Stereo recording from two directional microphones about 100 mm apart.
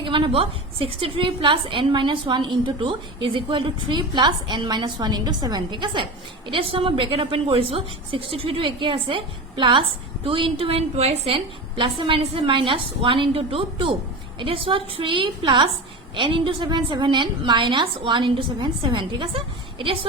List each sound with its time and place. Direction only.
0.0 s a woman's voice: 60° right (ahead or behind); by 11.4 s 90° right
11.8 s a woman's voice: 55° right (ahead or behind)